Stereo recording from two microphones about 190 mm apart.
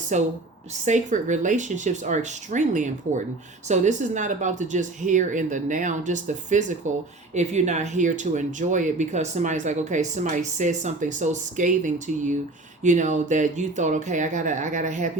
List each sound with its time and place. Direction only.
0.1 s speech: 40° right (ahead or behind)